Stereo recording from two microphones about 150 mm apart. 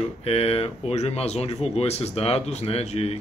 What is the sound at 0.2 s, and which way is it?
Speech, 40° left (ahead or behind).